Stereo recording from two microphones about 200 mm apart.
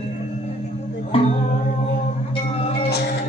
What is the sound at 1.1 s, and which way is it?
Music, 25° left (ahead or behind).